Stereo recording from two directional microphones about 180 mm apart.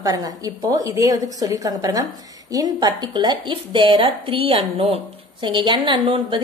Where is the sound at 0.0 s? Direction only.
20° right (ahead or behind).